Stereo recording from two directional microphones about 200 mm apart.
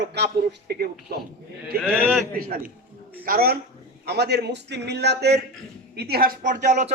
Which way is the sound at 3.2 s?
50° right (ahead or behind).